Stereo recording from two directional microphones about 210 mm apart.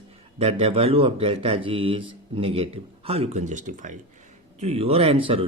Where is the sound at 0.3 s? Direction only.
30° right (ahead or behind).